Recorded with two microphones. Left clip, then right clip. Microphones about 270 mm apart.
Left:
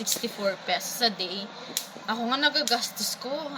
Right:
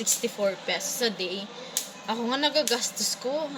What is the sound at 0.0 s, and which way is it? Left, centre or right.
Speech, centre.